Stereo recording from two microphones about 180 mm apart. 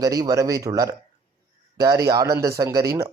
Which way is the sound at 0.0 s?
20° right (ahead or behind).